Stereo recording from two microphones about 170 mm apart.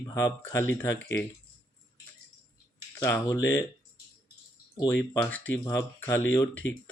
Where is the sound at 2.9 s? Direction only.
15° left (ahead or behind).